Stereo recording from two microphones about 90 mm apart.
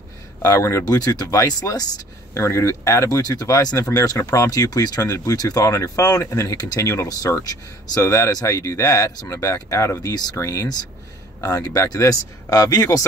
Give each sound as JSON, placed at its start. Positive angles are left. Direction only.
{"t": 0.4, "sound": "speech", "side_deg": 35}
{"t": 0.9, "sound": "speech", "side_deg": 45}